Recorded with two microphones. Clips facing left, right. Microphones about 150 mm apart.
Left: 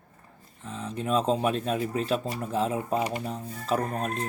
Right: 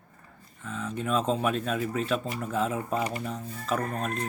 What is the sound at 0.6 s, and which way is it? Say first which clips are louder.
Speech: left 1 dB; 35° left (ahead or behind).